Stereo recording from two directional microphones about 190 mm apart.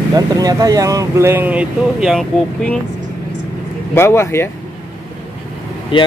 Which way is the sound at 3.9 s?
15° left (ahead or behind).